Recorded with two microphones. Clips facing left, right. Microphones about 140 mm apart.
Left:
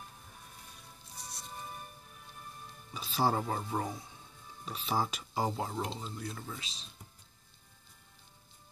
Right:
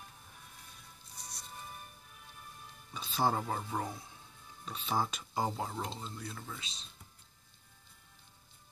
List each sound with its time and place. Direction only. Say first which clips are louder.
1.1 s music: left 3 dB; 60° left (ahead or behind)
2.9 s speech: left 1 dB; centre (ahead or behind)